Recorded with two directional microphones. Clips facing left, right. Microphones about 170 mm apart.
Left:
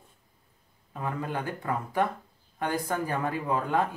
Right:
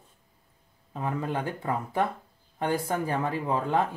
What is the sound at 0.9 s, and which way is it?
Speech, 20° right (ahead or behind).